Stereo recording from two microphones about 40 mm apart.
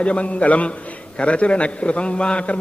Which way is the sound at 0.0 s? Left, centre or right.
Left.